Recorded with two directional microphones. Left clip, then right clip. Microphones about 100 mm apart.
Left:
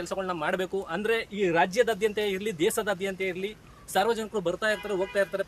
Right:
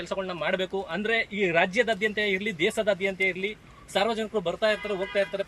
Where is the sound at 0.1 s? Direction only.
50° left (ahead or behind).